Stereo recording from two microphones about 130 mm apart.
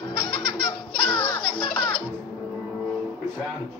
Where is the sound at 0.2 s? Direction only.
40° left (ahead or behind).